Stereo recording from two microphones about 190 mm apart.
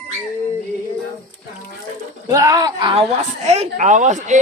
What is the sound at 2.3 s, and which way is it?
Speech, 15° right (ahead or behind).